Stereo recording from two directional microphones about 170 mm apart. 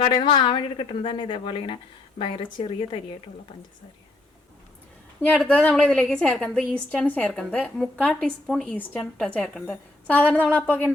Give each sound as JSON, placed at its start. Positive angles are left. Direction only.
{"t": 0.0, "sound": "a woman's voice", "side_deg": 30}
{"t": 5.2, "sound": "a woman's voice", "side_deg": 5}